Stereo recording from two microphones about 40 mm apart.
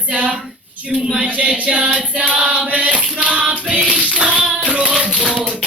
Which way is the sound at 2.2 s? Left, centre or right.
Right.